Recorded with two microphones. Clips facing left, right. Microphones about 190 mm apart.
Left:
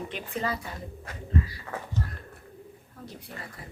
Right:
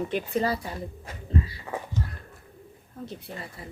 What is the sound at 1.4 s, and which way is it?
Speech, 25° right (ahead or behind).